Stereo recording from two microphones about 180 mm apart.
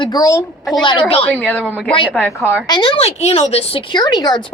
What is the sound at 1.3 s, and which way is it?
Speech, 10° left (ahead or behind).